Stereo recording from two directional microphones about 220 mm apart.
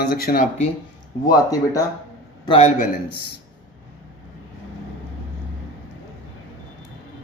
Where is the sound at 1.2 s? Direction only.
15° left (ahead or behind).